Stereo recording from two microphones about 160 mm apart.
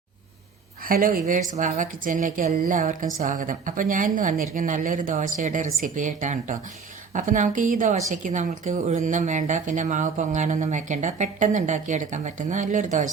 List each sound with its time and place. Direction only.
0.9 s speech: 60° right (ahead or behind)
1.2 s a woman's voice: 50° right (ahead or behind)